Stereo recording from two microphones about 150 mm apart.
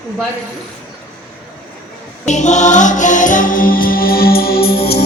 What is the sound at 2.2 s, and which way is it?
Music, 50° left (ahead or behind).